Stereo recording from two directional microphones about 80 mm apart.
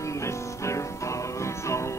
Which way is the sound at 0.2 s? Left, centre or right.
Left.